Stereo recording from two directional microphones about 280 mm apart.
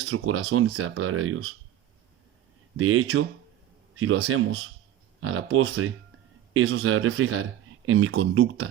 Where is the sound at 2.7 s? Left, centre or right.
Right.